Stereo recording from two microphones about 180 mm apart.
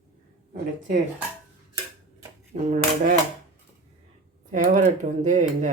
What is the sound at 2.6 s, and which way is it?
Speech, 45° right (ahead or behind).